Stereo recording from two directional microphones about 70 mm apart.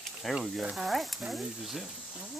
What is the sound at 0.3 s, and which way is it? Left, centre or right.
Speech, centre.